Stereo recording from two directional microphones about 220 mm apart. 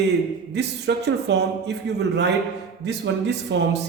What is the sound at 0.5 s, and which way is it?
Speech, 50° right (ahead or behind).